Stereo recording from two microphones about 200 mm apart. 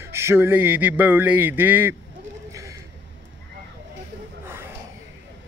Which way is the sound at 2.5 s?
15° right (ahead or behind).